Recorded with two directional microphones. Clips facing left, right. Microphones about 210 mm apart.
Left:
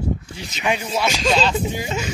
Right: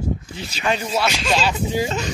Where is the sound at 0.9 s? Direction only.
5° right (ahead or behind).